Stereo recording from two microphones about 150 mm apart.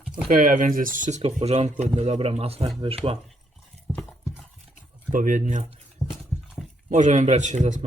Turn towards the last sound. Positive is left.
turn(degrees=-55)  # may be behind; listen again after turning